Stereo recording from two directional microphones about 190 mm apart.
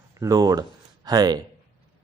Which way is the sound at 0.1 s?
20° right (ahead or behind).